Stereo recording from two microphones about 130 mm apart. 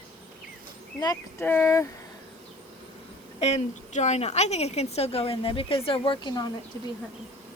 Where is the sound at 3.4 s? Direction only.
60° left (ahead or behind); by 6.3 s 45° left (ahead or behind).